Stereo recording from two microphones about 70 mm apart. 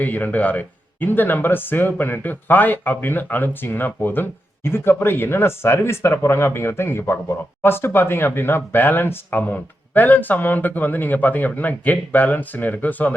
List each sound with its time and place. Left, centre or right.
0.0 s speech: left